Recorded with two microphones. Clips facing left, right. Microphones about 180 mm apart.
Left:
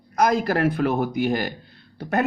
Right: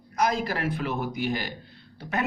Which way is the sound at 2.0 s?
45° left (ahead or behind).